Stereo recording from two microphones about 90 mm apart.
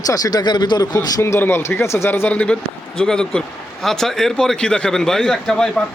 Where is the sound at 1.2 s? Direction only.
30° left (ahead or behind).